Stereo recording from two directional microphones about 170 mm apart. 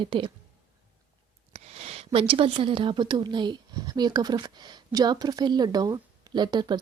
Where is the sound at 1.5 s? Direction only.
35° right (ahead or behind).